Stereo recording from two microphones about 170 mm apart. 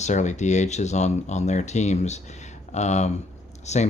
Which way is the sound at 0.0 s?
45° left (ahead or behind).